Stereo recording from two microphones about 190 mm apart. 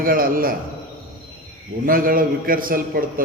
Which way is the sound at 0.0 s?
50° right (ahead or behind).